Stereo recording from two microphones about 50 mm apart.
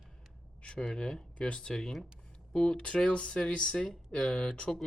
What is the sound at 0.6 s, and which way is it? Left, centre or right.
Speech, centre.